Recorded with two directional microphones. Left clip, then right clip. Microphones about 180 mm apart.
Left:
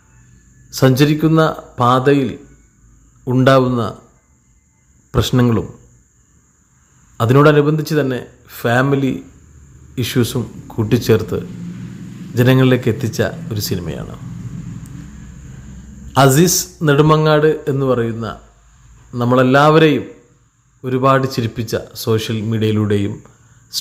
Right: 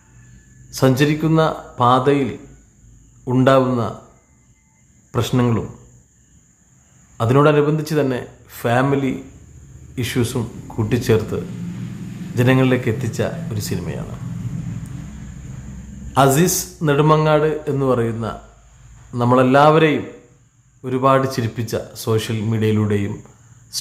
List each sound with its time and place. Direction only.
0.7 s speech: 15° left (ahead or behind)
5.1 s speech: 15° left (ahead or behind)
7.2 s speech: 20° left (ahead or behind)
16.1 s speech: 20° left (ahead or behind)